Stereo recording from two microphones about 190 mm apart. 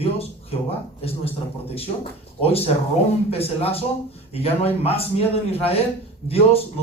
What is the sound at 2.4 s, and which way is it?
A man's voice, 30° left (ahead or behind).